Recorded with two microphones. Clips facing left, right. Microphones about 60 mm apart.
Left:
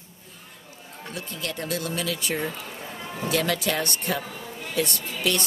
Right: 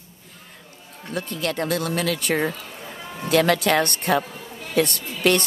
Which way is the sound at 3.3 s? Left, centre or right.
Right.